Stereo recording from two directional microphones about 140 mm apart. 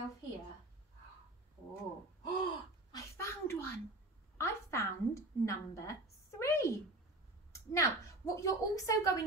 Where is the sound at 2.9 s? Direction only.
25° left (ahead or behind).